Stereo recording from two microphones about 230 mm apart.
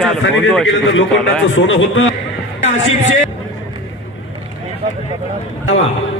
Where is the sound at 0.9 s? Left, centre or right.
Left.